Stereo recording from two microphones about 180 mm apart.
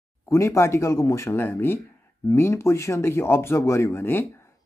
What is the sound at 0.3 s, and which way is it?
Speech, 15° left (ahead or behind).